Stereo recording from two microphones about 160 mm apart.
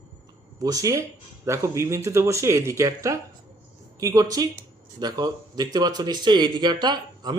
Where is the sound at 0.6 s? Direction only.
20° right (ahead or behind).